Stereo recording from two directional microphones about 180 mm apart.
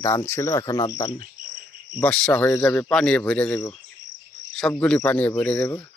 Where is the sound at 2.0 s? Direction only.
5° left (ahead or behind).